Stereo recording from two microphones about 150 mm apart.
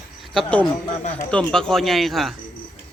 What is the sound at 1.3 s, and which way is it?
Speech, 5° left (ahead or behind).